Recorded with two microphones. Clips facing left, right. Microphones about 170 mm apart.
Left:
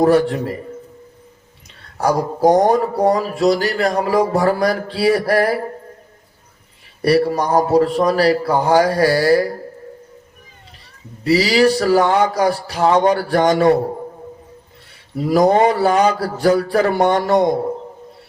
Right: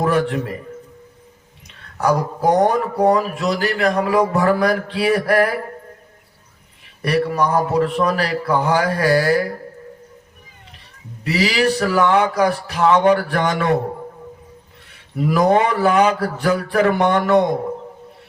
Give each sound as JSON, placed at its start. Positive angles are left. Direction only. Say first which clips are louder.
{"t": 0.0, "sound": "speech", "louder": "left 5 dB", "side_deg": 35}
{"t": 2.0, "sound": "speech", "louder": "left 2 dB", "side_deg": 35}
{"t": 7.0, "sound": "speech", "louder": "left 3 dB", "side_deg": 35}
{"t": 11.2, "sound": "speech", "louder": "left 5 dB", "side_deg": 35}
{"t": 15.2, "sound": "speech", "louder": "left 2 dB", "side_deg": 35}